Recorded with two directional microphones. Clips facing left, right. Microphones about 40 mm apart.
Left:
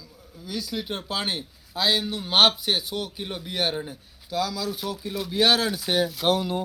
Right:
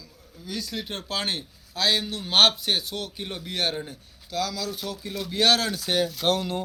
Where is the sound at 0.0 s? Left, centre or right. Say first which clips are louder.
Left 1 dB; centre.